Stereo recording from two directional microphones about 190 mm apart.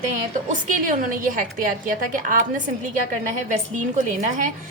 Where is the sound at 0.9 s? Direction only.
45° right (ahead or behind).